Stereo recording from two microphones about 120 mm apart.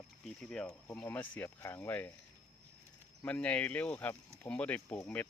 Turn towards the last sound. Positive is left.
turn(degrees=15)  # may be behind; listen again after turning